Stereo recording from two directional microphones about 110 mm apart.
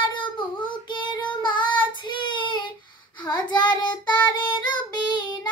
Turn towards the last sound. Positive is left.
turn(degrees=40)  # may be behind; listen again after turning